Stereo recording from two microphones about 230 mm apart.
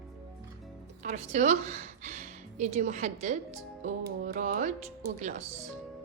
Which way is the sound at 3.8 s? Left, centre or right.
Right.